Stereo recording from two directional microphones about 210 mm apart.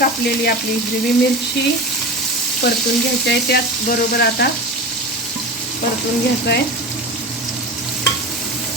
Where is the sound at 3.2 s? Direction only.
50° left (ahead or behind).